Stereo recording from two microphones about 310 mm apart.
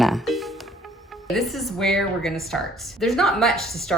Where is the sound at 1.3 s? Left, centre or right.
Centre.